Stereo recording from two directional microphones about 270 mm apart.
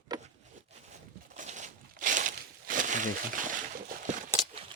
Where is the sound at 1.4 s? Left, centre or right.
Right.